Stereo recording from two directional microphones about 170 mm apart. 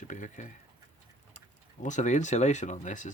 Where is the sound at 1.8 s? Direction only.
45° left (ahead or behind).